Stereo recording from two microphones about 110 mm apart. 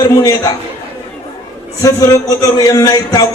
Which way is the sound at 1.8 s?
30° left (ahead or behind).